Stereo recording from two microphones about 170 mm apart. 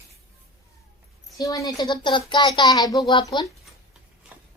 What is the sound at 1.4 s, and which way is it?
Speech, 20° left (ahead or behind).